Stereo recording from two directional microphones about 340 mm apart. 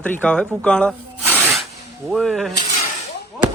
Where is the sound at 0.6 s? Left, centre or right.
Centre.